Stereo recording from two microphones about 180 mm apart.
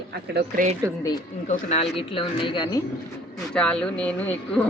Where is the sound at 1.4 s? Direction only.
40° left (ahead or behind).